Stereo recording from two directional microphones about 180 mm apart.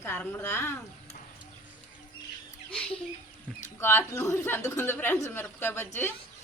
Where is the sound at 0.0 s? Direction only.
10° left (ahead or behind).